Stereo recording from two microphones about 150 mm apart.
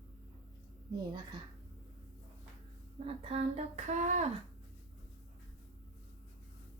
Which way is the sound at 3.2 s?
45° right (ahead or behind).